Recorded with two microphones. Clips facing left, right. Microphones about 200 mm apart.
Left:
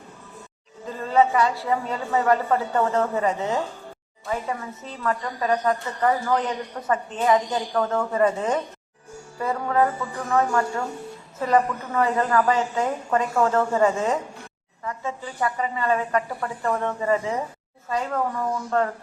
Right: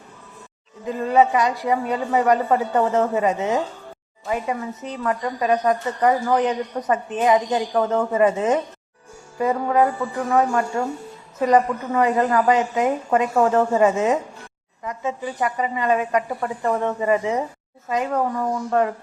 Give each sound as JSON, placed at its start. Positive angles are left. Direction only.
{"t": 0.9, "sound": "a woman's voice", "side_deg": -15}